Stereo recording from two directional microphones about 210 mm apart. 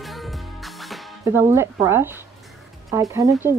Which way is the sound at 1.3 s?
10° right (ahead or behind).